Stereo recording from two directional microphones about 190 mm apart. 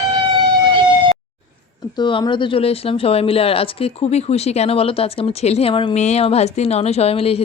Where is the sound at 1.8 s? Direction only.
20° left (ahead or behind).